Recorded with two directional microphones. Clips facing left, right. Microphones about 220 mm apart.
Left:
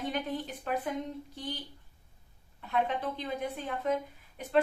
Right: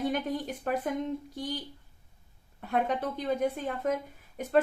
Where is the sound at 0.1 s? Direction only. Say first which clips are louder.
Right 3 dB; 45° right (ahead or behind).